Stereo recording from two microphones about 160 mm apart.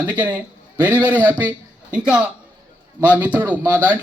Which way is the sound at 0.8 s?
10° right (ahead or behind).